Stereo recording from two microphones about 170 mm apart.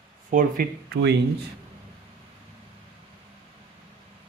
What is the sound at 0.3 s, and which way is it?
Speech, 55° right (ahead or behind).